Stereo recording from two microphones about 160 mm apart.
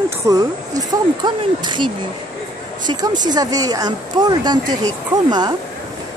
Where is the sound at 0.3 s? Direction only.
20° right (ahead or behind).